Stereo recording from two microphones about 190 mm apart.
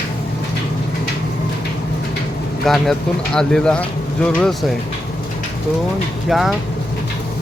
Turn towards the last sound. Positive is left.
turn(degrees=0)  # may be behind; listen again after turning